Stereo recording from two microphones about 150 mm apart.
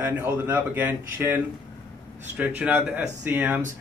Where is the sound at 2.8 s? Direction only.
5° right (ahead or behind).